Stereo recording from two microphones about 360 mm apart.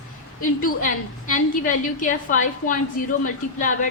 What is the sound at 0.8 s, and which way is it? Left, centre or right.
A woman's voice, left.